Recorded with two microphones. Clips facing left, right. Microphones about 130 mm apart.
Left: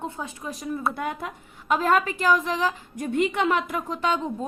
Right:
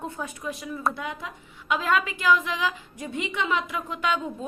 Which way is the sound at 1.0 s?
50° left (ahead or behind).